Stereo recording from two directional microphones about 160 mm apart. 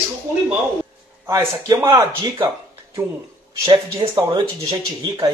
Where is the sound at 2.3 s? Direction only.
25° right (ahead or behind).